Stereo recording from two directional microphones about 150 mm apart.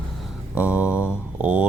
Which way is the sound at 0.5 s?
10° right (ahead or behind).